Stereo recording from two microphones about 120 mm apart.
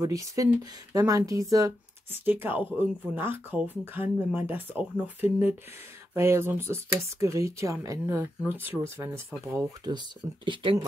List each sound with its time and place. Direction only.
0.0 s speech: 30° right (ahead or behind)
2.0 s speech: 15° right (ahead or behind)
9.8 s speech: 40° right (ahead or behind)